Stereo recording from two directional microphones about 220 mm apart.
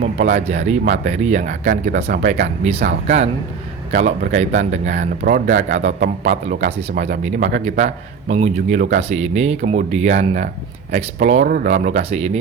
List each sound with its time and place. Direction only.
0.0 s speech: 30° right (ahead or behind)